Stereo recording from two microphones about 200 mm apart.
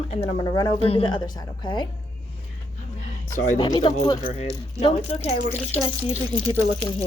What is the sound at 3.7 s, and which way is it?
Speech, 25° left (ahead or behind).